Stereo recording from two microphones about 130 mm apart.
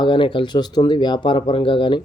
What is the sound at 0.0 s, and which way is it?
Speech, 40° left (ahead or behind).